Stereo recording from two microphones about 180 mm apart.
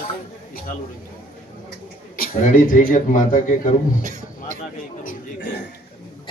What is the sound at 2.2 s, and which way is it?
A man's voice, 50° left (ahead or behind).